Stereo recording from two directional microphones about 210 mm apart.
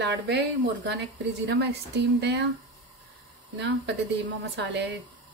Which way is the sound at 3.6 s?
60° right (ahead or behind).